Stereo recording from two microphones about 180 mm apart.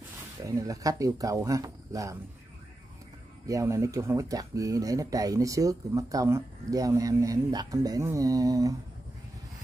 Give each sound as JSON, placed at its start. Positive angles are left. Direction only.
{"t": 0.4, "sound": "speech", "side_deg": -15}
{"t": 3.4, "sound": "speech", "side_deg": -15}